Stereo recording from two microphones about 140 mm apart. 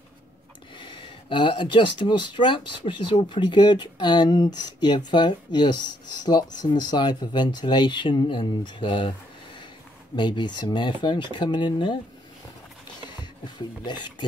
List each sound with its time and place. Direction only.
0.7 s speech: 35° left (ahead or behind)
10.1 s speech: 35° left (ahead or behind)
13.6 s speech: 35° left (ahead or behind)